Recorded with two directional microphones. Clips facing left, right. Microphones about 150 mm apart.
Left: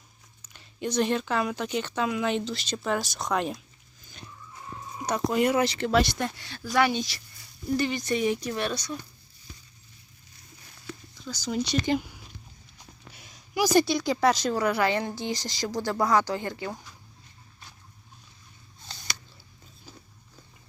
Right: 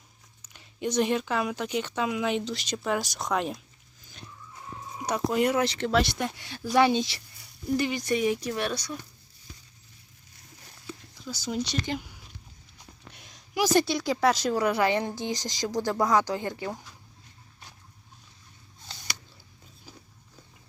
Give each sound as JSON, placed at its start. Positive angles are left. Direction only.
{"t": 0.4, "sound": "speech", "side_deg": -15}
{"t": 4.9, "sound": "speech", "side_deg": -5}
{"t": 7.8, "sound": "speech", "side_deg": -10}
{"t": 11.3, "sound": "speech", "side_deg": 0}
{"t": 13.1, "sound": "speech", "side_deg": 0}
{"t": 14.6, "sound": "speech", "side_deg": -15}